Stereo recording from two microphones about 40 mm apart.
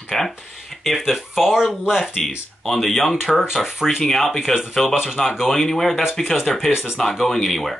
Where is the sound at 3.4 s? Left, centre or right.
Centre.